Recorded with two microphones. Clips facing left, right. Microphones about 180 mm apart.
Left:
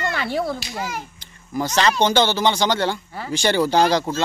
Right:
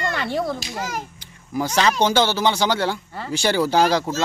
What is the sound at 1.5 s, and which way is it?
Speech, 10° right (ahead or behind).